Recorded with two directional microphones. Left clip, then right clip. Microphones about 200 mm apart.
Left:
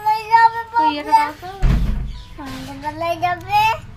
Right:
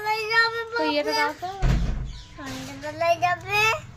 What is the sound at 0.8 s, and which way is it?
Child singing, 30° right (ahead or behind).